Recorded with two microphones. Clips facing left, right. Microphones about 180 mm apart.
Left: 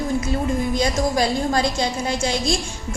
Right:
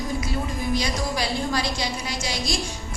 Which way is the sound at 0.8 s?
50° left (ahead or behind).